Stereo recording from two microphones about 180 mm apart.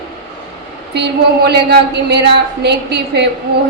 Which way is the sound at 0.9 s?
70° right (ahead or behind).